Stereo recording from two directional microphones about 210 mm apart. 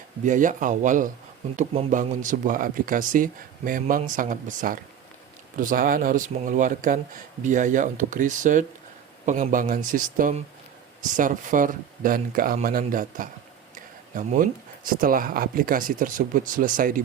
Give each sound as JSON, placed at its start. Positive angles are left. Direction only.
{"t": 0.3, "sound": "speech", "side_deg": -40}